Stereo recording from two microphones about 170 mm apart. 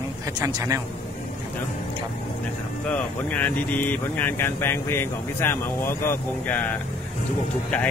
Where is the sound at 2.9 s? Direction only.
10° left (ahead or behind).